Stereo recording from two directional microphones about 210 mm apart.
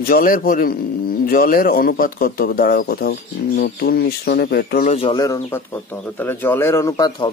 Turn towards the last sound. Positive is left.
turn(degrees=15)  # may be behind; listen again after turning